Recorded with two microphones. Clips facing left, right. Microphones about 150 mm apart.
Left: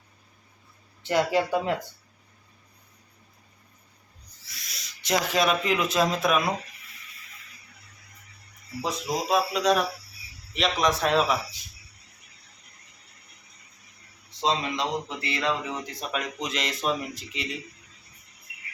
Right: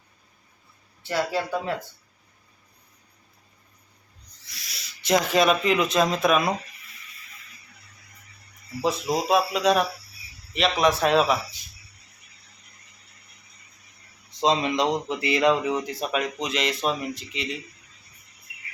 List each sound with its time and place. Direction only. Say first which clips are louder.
1.0 s speech: left 3 dB; 15° left (ahead or behind)
4.4 s owl: right 1 dB; centre (ahead or behind)
5.2 s speech: right 2 dB; centre (ahead or behind)
9.3 s speech: right 2 dB; 5° right (ahead or behind)
14.4 s speech: right 5 dB; 20° right (ahead or behind); by 17.5 s centre (ahead or behind)